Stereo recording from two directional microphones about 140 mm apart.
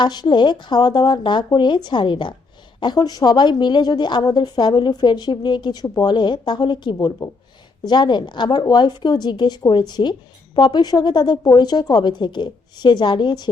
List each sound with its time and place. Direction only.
0.0 s a woman's voice: 30° left (ahead or behind)